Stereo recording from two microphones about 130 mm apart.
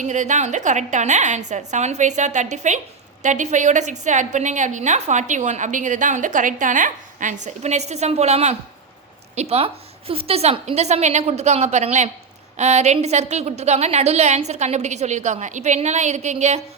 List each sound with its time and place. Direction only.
0.0 s a woman's voice: 70° right (ahead or behind)